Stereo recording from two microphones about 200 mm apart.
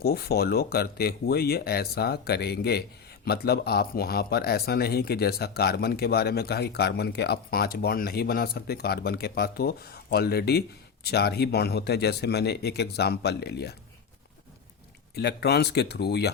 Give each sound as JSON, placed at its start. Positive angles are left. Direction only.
{"t": 0.0, "sound": "speech", "side_deg": 50}
{"t": 15.1, "sound": "speech", "side_deg": 55}